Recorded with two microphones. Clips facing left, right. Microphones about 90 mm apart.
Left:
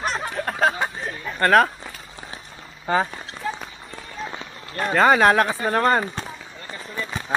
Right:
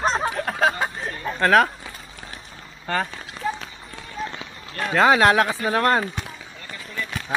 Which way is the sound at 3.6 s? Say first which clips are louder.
Left 1 dB; 5° left (ahead or behind).